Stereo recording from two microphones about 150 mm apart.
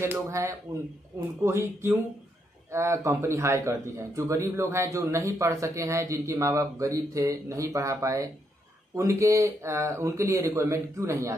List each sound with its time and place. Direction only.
0.0 s a man's voice: 20° right (ahead or behind)